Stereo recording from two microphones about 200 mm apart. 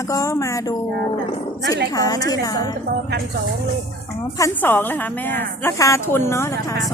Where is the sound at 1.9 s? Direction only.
15° left (ahead or behind).